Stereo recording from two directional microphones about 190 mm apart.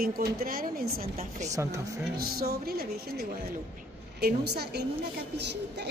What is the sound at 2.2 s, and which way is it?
A woman's voice, 55° right (ahead or behind).